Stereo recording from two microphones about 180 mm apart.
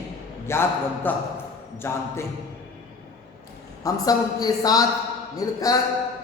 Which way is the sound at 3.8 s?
20° left (ahead or behind).